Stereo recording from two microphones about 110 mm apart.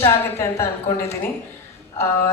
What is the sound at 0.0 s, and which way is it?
A woman's voice, 25° left (ahead or behind).